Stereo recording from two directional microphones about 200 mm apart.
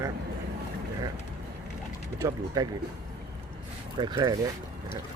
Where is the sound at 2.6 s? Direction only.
20° right (ahead or behind).